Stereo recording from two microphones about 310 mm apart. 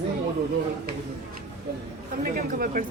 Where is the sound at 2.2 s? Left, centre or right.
Right.